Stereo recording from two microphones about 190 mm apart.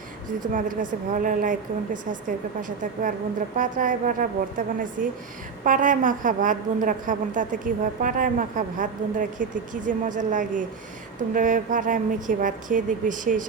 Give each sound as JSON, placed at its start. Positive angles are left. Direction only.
{"t": 0.5, "sound": "a woman's voice", "side_deg": -45}